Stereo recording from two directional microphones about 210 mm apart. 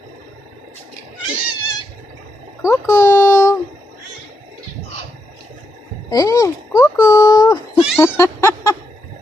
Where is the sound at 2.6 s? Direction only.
10° left (ahead or behind).